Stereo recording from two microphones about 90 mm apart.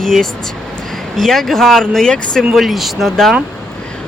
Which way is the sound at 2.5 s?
Centre (ahead or behind).